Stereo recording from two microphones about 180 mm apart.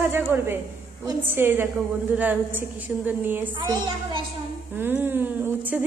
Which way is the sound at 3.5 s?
25° right (ahead or behind).